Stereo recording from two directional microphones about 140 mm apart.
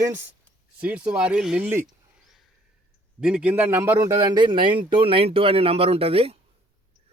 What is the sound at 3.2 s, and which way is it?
A man's voice, 5° right (ahead or behind).